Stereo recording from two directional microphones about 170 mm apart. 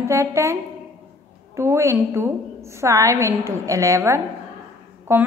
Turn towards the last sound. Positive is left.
turn(degrees=-15)  # may be behind; listen again after turning